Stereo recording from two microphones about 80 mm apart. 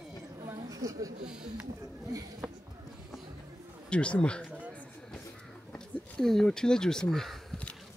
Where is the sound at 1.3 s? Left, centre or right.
Centre.